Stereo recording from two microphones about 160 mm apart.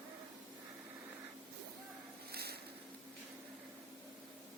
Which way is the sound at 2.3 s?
80° right.